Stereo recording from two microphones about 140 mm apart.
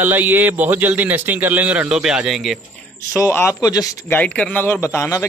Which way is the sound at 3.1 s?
20° left (ahead or behind).